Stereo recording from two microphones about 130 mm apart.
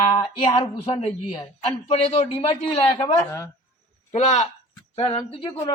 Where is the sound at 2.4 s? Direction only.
50° left (ahead or behind).